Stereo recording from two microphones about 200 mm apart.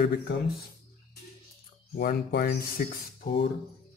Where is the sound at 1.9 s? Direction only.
50° left (ahead or behind).